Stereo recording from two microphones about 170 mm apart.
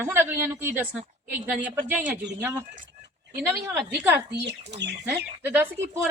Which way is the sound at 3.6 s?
10° right (ahead or behind).